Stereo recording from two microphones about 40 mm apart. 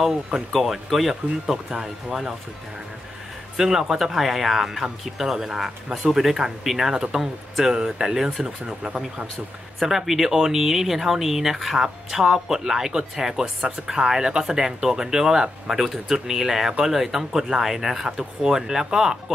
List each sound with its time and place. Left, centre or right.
0.0 s speech: centre
3.5 s speech: centre
9.8 s speech: centre